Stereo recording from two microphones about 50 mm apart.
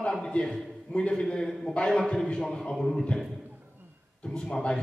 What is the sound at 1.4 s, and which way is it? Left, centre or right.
Speech, centre.